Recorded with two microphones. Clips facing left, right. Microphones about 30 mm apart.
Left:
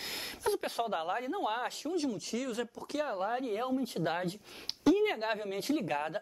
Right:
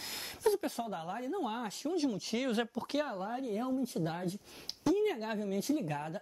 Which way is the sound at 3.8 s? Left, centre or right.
Left.